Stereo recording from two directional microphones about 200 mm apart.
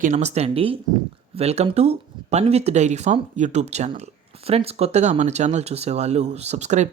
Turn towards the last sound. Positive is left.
turn(degrees=-35)  # may be behind; listen again after turning